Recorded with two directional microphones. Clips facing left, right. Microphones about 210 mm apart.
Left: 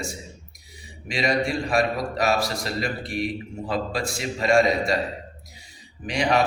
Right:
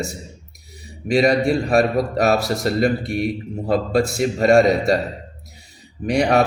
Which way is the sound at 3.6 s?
55° right (ahead or behind).